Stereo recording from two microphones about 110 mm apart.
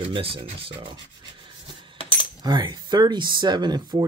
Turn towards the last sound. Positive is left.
turn(degrees=-40)  # may be behind; listen again after turning